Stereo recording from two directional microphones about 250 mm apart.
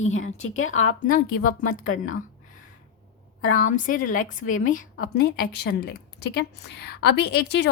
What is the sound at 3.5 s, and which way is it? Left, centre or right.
A woman's voice, left.